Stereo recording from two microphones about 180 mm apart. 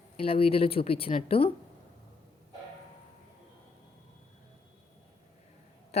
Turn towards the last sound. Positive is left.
turn(degrees=35)  # may be behind; listen again after turning